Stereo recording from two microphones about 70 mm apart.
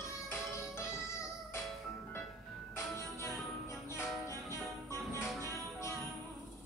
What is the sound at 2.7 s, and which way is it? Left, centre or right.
Music, left.